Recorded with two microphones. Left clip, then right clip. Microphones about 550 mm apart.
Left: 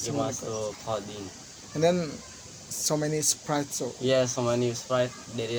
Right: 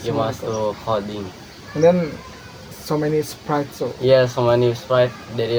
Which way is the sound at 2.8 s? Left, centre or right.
Left.